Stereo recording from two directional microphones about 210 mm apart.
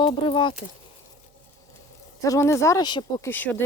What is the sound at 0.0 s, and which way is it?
Speech, 25° left (ahead or behind).